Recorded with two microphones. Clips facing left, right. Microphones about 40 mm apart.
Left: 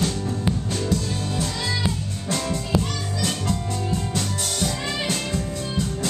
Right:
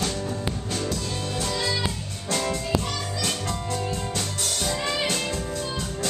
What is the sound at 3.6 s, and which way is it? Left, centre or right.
Music, centre.